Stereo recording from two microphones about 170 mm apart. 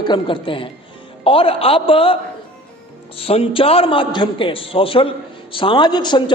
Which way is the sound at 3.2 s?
35° left (ahead or behind).